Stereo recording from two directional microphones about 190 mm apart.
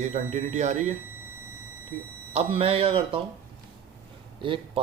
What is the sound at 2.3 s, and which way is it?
Speech, 30° right (ahead or behind).